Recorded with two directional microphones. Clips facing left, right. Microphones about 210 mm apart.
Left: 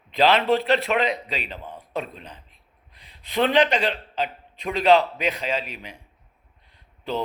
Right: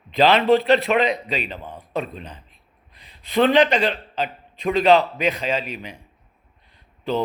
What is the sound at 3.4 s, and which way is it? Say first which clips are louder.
Speech: right 3 dB; 45° right (ahead or behind).